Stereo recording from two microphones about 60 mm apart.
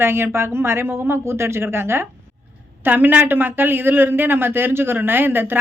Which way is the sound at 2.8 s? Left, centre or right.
Right.